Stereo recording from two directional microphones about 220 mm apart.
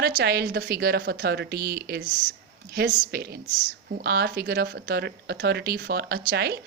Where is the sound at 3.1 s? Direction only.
45° right (ahead or behind).